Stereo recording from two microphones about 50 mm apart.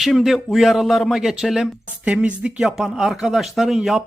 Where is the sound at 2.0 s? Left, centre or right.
Right.